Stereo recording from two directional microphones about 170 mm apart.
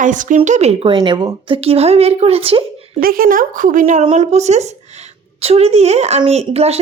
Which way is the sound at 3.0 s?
55° right (ahead or behind).